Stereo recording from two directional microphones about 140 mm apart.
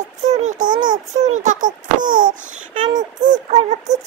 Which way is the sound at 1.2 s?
60° right (ahead or behind).